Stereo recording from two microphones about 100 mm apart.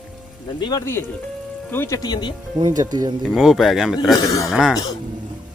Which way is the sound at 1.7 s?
20° left (ahead or behind).